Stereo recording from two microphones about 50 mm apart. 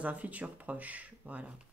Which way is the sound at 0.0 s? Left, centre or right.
Right.